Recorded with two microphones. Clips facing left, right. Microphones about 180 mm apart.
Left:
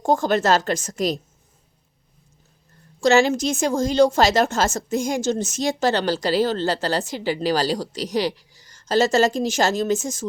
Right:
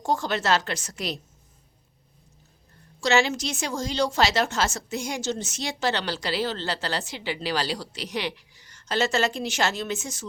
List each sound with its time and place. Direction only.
0.0 s a woman's voice: 50° left (ahead or behind)
3.0 s a woman's voice: 45° left (ahead or behind)